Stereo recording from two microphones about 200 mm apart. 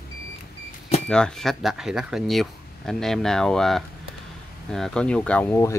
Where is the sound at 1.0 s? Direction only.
5° left (ahead or behind).